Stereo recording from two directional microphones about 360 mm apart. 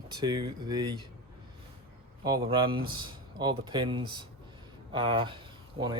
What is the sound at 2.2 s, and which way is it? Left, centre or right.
Speech, centre.